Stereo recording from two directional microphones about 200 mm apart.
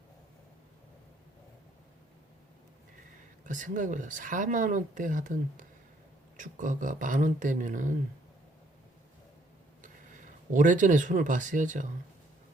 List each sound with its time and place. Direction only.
3.4 s speech: 40° right (ahead or behind)
10.5 s speech: 40° right (ahead or behind)